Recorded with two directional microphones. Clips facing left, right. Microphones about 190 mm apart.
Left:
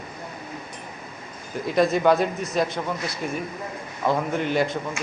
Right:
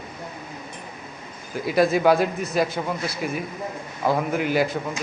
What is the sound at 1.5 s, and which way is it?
A man's voice, 5° right (ahead or behind).